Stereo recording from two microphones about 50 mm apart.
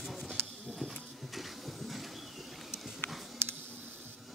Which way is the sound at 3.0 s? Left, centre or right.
Left.